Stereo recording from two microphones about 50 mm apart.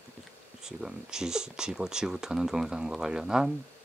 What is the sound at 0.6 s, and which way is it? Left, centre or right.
Speech, centre.